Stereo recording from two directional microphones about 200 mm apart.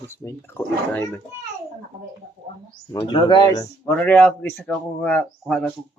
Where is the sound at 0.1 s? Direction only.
15° left (ahead or behind).